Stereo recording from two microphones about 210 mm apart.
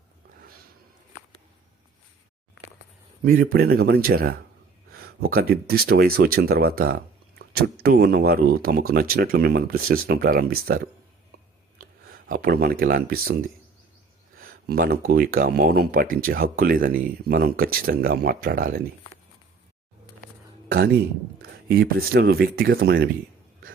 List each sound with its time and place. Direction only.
3.2 s speech: 45° right (ahead or behind)
11.8 s a sound: 45° right (ahead or behind)
12.8 s speech: 45° right (ahead or behind)
14.3 s speech: 45° right (ahead or behind)
20.7 s speech: 45° right (ahead or behind)